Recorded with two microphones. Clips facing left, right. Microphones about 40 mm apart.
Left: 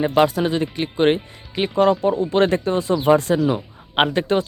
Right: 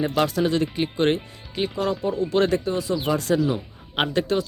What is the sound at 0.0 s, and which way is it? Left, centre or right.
Speech, left.